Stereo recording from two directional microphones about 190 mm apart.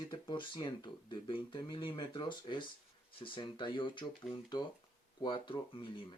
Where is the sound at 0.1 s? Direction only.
25° left (ahead or behind).